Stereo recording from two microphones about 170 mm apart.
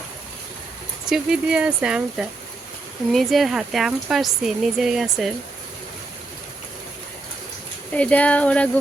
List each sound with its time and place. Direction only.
1.0 s speech: 5° right (ahead or behind)
7.9 s speech: 10° left (ahead or behind)